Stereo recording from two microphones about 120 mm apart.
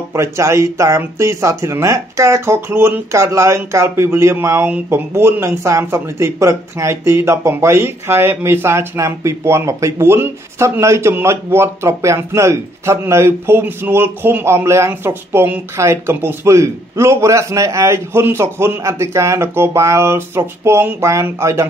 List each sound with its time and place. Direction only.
0.1 s speech: 25° right (ahead or behind)